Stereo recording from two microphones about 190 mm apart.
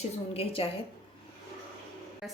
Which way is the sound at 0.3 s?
30° left (ahead or behind).